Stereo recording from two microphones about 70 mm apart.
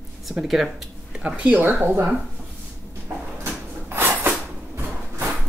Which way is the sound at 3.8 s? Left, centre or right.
Right.